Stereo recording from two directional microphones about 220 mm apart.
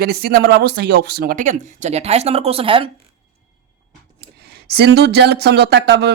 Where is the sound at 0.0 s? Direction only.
45° right (ahead or behind); by 2.9 s 25° right (ahead or behind).